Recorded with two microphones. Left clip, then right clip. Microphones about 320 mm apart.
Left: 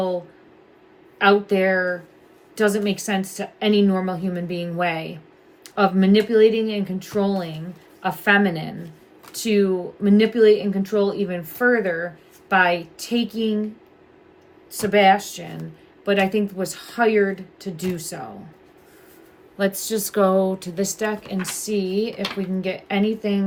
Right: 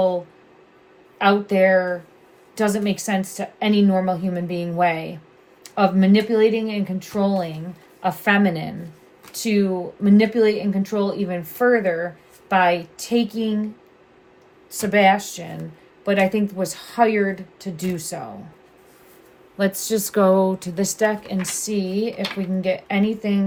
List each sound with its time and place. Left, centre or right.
1.2 s speech: centre
14.7 s speech: centre
19.5 s speech: centre